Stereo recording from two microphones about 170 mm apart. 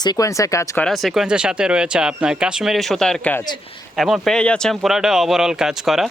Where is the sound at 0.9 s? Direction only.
Centre (ahead or behind).